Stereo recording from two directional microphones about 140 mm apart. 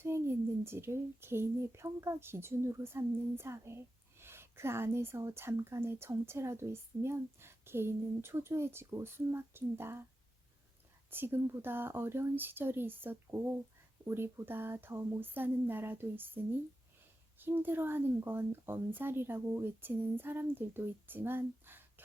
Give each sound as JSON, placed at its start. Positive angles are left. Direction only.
{"t": 0.0, "sound": "speech", "side_deg": -15}
{"t": 11.1, "sound": "speech", "side_deg": -15}